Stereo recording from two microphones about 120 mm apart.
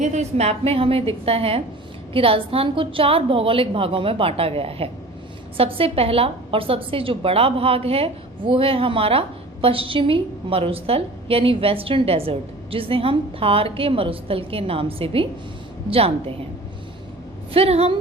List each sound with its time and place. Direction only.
0.0 s a woman's voice: 75° right (ahead or behind); by 16.3 s 55° right (ahead or behind)
17.5 s a woman's voice: 55° right (ahead or behind)